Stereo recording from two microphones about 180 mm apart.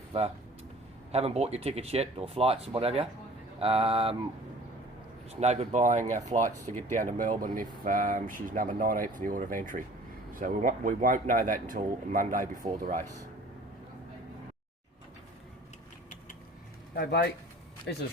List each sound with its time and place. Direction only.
1.1 s speech: 35° right (ahead or behind)
5.3 s speech: 35° right (ahead or behind)
16.9 s speech: 55° left (ahead or behind)